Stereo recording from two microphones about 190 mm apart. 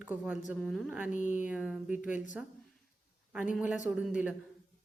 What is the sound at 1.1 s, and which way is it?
Speech, 40° left (ahead or behind).